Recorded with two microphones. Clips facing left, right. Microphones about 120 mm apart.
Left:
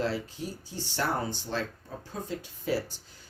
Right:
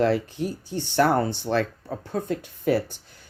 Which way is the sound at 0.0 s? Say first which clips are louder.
Right 9 dB; 60° right (ahead or behind).